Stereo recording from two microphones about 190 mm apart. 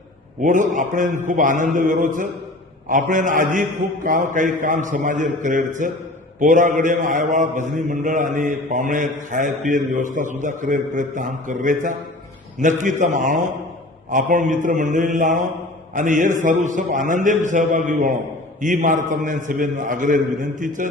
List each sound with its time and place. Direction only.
0.4 s a man's voice: 40° right (ahead or behind)